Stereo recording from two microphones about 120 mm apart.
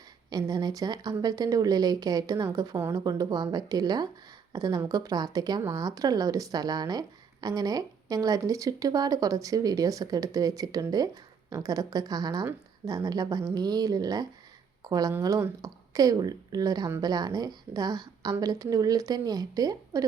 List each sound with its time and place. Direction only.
0.3 s a woman's voice: 30° right (ahead or behind)